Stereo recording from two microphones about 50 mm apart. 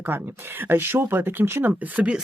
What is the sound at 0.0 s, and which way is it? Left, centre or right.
Speech, right.